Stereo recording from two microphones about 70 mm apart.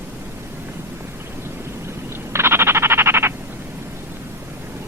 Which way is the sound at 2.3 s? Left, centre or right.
Right.